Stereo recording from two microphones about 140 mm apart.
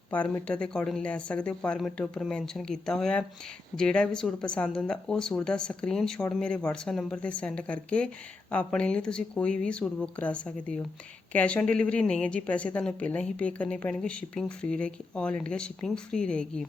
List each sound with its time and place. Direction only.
0.1 s speech: 10° left (ahead or behind)